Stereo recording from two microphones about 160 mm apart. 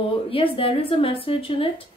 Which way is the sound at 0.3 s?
35° left (ahead or behind).